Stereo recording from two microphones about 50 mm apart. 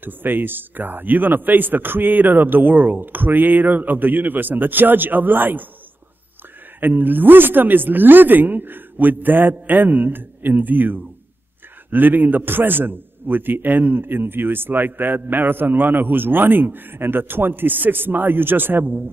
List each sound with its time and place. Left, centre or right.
0.0 s a man's voice: right
6.8 s a man's voice: right